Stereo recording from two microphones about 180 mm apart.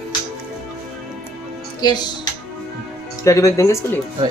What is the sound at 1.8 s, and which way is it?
Speech, 25° left (ahead or behind).